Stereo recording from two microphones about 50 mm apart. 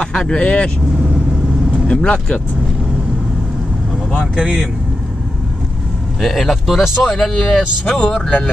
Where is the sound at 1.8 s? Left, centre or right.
Left.